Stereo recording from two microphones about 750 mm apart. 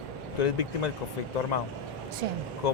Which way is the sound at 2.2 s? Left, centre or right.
Right.